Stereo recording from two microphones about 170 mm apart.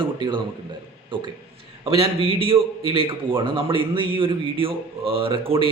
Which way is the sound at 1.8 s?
35° right (ahead or behind).